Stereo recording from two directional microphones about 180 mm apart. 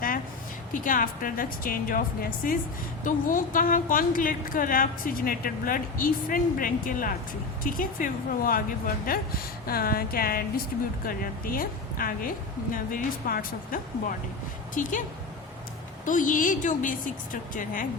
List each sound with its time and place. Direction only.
0.7 s a woman's voice: 50° left (ahead or behind)
3.0 s a woman's voice: 45° left (ahead or behind)
16.0 s a woman's voice: 45° left (ahead or behind)